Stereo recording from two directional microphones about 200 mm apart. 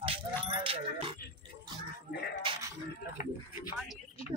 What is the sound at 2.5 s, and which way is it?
Speech, 15° right (ahead or behind).